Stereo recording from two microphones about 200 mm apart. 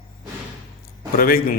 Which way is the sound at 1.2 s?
45° left (ahead or behind).